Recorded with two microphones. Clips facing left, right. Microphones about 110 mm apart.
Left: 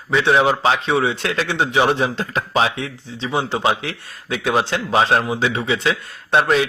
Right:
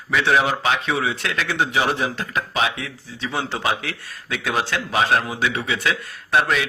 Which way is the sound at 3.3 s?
20° left (ahead or behind).